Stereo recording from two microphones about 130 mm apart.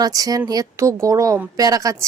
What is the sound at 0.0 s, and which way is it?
Speech, 30° right (ahead or behind).